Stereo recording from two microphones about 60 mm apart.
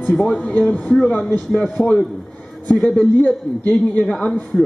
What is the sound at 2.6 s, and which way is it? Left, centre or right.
A man's voice, left.